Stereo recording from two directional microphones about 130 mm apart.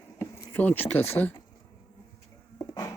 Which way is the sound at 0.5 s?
15° left (ahead or behind).